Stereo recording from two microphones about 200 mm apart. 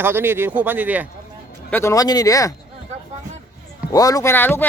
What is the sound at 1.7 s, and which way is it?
Speech, 10° left (ahead or behind).